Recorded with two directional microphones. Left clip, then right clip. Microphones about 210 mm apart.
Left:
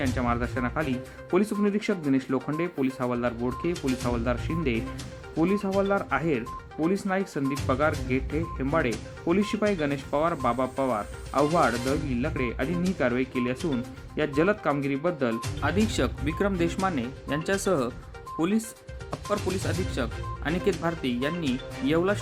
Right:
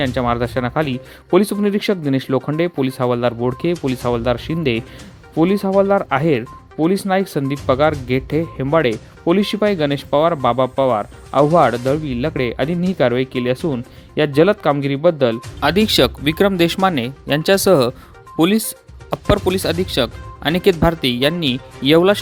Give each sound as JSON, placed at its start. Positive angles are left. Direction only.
{"t": 0.0, "sound": "speech", "side_deg": -40}